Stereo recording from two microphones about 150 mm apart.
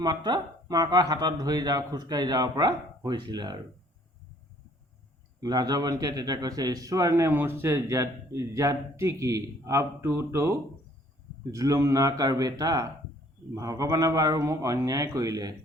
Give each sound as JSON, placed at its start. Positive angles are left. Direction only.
{"t": 0.0, "sound": "a man's voice", "side_deg": -30}
{"t": 5.4, "sound": "a man's voice", "side_deg": -30}